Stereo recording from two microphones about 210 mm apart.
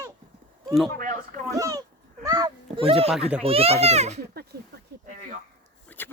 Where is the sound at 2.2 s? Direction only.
15° right (ahead or behind).